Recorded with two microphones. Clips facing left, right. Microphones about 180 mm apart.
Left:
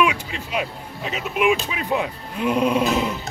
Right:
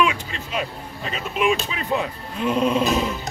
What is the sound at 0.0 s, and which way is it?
Speech, 10° left (ahead or behind).